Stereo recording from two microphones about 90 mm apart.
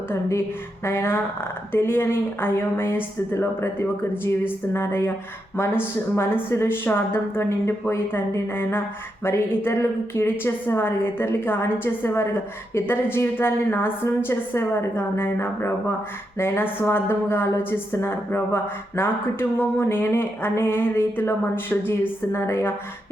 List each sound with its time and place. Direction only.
0.1 s a woman's voice: 30° left (ahead or behind)